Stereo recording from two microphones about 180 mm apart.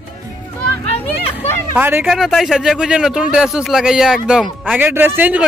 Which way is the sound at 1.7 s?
10° right (ahead or behind).